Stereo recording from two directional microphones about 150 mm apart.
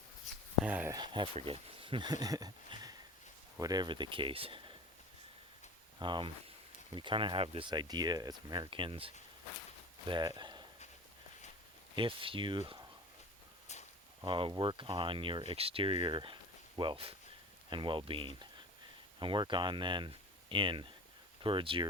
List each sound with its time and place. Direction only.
0.6 s speech: 10° right (ahead or behind)
0.9 s speech: 30° right (ahead or behind)
6.0 s speech: 30° right (ahead or behind)
11.9 s speech: 35° right (ahead or behind)
14.3 s speech: 35° right (ahead or behind)